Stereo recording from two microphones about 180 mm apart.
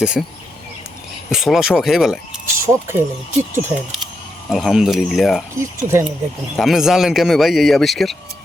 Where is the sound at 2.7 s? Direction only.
15° right (ahead or behind).